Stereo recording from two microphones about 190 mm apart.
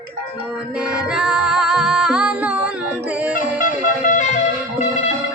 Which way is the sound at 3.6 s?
45° left (ahead or behind).